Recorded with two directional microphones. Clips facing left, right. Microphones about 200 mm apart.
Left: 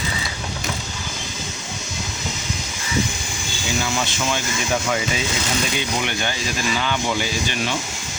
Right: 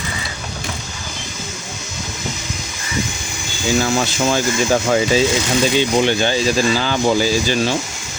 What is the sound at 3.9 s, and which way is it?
Speech, 40° right (ahead or behind).